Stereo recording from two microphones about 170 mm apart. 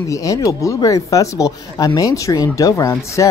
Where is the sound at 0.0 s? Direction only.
20° left (ahead or behind).